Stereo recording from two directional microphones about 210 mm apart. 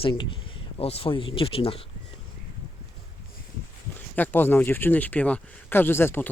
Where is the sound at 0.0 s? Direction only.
25° left (ahead or behind).